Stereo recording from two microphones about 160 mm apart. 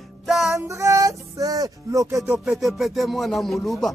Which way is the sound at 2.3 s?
5° right (ahead or behind).